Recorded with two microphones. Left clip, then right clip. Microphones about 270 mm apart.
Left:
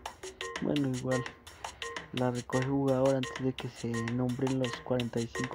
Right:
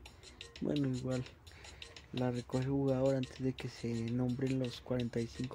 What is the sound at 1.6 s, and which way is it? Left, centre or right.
Music, left.